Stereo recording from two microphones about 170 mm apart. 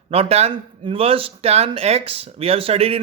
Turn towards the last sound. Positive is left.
turn(degrees=-35)  # may be behind; listen again after turning